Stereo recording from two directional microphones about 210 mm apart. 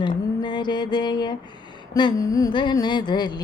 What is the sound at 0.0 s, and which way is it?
Mantra, 20° left (ahead or behind).